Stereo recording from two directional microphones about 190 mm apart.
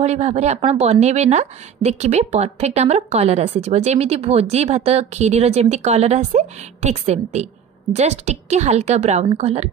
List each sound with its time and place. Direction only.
0.0 s speech: 35° right (ahead or behind)